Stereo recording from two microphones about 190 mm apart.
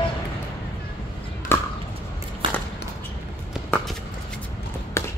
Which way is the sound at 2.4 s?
25° right (ahead or behind).